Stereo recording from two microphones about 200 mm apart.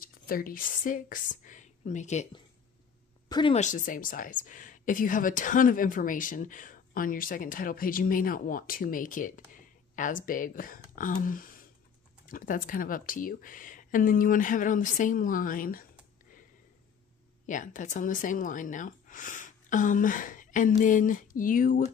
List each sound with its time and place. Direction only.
0.0 s a woman's voice: 45° left (ahead or behind)
3.3 s a sound: 20° left (ahead or behind)
3.5 s speech: 40° left (ahead or behind)
17.5 s speech: 40° left (ahead or behind)